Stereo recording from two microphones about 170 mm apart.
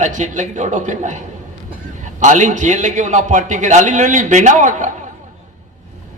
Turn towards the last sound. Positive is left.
turn(degrees=-45)  # may be behind; listen again after turning